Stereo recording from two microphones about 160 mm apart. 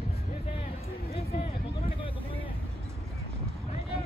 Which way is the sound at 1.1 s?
40° left (ahead or behind).